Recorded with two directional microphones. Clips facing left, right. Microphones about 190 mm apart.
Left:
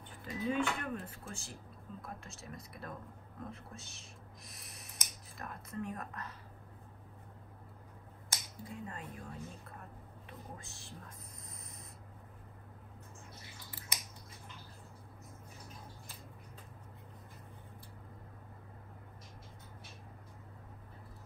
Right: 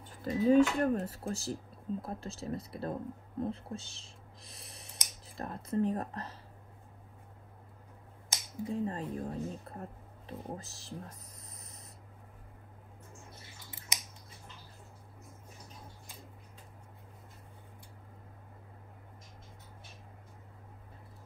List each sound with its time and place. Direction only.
0.2 s speech: 40° right (ahead or behind)
8.6 s speech: 30° right (ahead or behind)